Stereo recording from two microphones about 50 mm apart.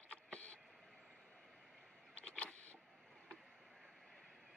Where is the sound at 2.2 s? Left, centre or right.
Left.